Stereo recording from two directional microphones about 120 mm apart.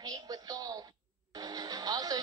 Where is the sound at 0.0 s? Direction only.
30° right (ahead or behind).